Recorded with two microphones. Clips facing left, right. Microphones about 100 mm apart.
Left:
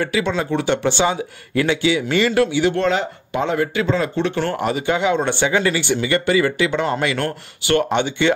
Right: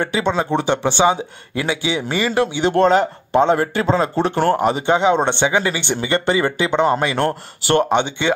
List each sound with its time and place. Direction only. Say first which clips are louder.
0.0 s speech: right 1 dB; 25° right (ahead or behind)
2.7 s speech: right 5 dB; 45° right (ahead or behind)
4.6 s speech: right 3 dB; 25° right (ahead or behind)
7.9 s speech: even; 20° right (ahead or behind)